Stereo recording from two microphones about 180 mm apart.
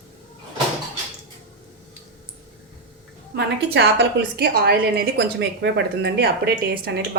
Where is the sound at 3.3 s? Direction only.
65° right (ahead or behind).